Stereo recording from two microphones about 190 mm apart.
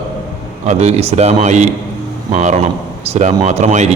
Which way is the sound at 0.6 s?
35° right (ahead or behind).